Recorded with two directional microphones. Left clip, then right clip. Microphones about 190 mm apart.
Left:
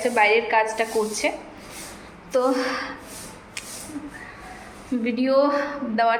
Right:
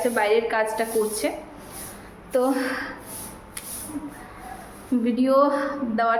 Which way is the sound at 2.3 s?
25° right (ahead or behind).